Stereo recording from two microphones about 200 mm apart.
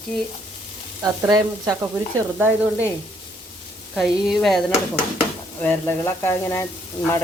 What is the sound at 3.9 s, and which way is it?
Speech, centre (ahead or behind).